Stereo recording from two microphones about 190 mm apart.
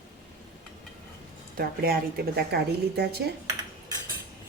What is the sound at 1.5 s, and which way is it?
A woman's voice, 50° right (ahead or behind).